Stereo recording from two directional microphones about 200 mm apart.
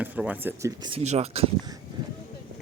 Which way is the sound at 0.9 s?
30° right (ahead or behind).